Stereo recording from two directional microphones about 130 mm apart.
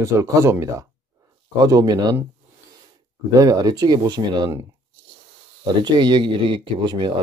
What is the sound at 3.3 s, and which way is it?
Speech, 30° right (ahead or behind).